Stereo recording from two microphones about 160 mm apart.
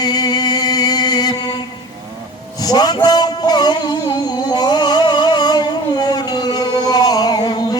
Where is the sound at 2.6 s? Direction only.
25° left (ahead or behind).